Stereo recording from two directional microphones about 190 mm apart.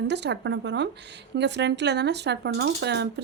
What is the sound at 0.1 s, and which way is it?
Speech, 65° right (ahead or behind).